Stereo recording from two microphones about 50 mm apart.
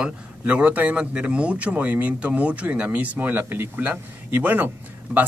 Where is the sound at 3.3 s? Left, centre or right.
Right.